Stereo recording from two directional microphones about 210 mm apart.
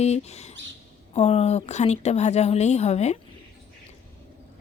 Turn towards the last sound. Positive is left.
turn(degrees=30)  # may be behind; listen again after turning